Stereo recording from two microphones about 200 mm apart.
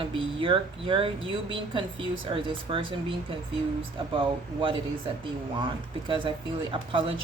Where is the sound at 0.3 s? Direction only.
25° right (ahead or behind).